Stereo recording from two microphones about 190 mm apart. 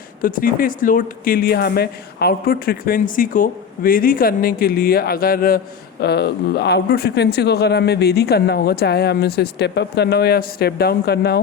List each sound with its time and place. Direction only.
0.2 s speech: 45° left (ahead or behind)